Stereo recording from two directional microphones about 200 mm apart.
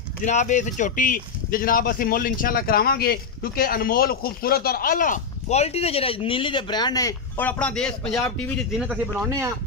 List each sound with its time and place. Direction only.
0.2 s speech: 35° left (ahead or behind); by 8.5 s 5° left (ahead or behind)
8.7 s a man's voice: 5° right (ahead or behind)